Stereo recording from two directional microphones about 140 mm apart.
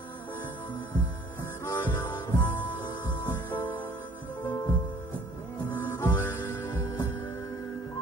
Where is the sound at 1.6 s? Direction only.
15° left (ahead or behind).